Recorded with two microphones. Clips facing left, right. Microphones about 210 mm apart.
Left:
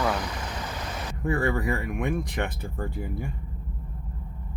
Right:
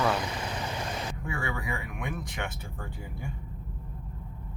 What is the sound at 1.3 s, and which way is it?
Speech, 50° left (ahead or behind).